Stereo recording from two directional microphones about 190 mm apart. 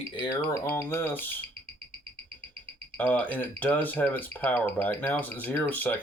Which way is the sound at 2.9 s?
10° left (ahead or behind).